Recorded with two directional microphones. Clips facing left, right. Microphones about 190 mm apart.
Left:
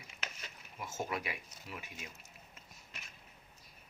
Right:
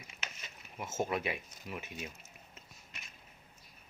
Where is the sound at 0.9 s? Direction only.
25° right (ahead or behind).